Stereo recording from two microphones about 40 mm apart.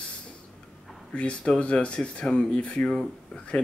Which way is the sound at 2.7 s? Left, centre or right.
Centre.